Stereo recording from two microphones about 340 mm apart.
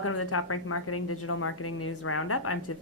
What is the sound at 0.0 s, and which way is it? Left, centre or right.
Speech, left.